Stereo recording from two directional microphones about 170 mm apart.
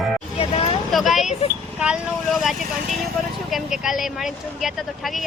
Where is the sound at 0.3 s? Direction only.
35° left (ahead or behind).